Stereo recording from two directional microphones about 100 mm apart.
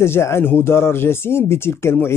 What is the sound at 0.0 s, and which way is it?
Speech, 25° left (ahead or behind).